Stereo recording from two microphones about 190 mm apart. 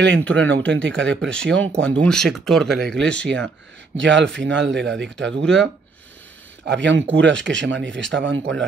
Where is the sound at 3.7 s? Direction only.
70° right (ahead or behind).